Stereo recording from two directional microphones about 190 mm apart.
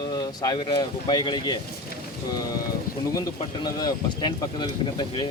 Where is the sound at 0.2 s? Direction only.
20° left (ahead or behind).